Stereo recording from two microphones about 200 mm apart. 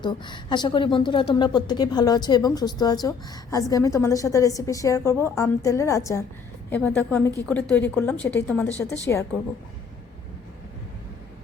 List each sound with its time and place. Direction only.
0.0 s a woman's voice: 20° left (ahead or behind)